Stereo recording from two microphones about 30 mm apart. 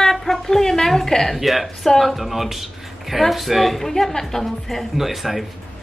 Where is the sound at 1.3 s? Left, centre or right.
Centre.